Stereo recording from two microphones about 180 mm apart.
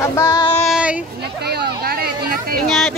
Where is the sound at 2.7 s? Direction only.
Centre (ahead or behind).